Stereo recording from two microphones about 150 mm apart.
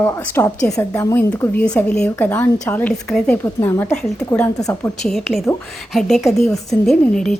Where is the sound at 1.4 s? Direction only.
5° left (ahead or behind).